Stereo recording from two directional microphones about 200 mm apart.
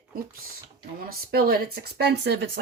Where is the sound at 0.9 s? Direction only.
50° right (ahead or behind).